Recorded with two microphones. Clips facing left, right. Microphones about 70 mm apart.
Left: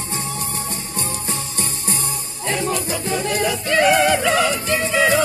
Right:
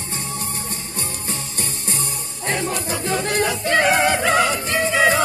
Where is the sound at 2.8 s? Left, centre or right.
Right.